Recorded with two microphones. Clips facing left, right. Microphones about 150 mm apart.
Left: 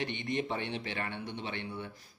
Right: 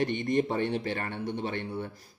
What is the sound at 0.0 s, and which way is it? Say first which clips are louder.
A man's voice: right 7 dB; 45° right (ahead or behind).